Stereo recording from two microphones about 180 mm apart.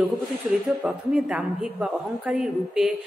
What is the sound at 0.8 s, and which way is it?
A woman's voice, 5° right (ahead or behind).